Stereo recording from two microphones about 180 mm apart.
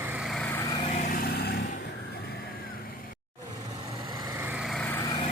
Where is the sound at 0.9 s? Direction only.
45° left (ahead or behind).